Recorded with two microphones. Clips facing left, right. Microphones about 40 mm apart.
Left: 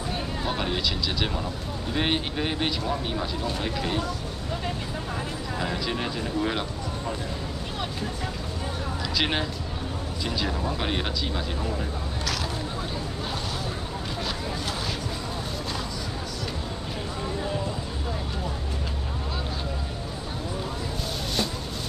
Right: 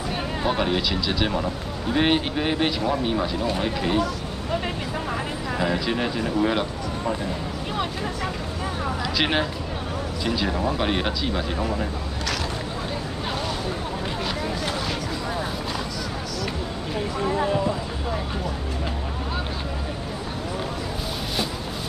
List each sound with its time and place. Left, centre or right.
0.4 s speech: centre
5.6 s speech: centre
9.1 s speech: centre
10.8 s speech: centre
17.2 s speech: right